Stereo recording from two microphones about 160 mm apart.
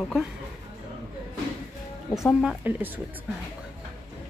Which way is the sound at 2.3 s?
5° right (ahead or behind).